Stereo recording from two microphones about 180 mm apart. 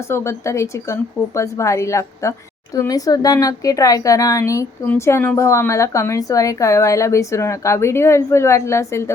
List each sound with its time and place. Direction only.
0.1 s speech: 15° left (ahead or behind)